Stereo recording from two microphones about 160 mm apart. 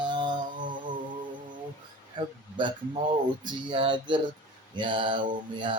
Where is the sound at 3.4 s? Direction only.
30° right (ahead or behind).